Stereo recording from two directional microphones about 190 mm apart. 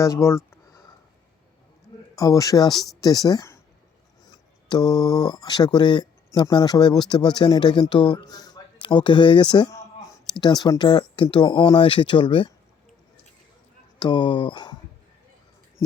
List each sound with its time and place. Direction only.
0.0 s a sound: 15° left (ahead or behind)
2.1 s speech: 20° left (ahead or behind)
2.7 s speech: centre (ahead or behind)
3.2 s speech: 15° left (ahead or behind)
4.7 s speech: 20° left (ahead or behind)
14.0 s speech: 25° left (ahead or behind)